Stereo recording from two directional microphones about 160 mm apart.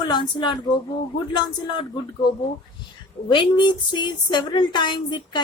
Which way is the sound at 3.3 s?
30° left (ahead or behind).